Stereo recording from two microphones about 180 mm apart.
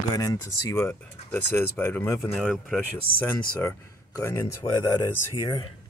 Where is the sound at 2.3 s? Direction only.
5° right (ahead or behind).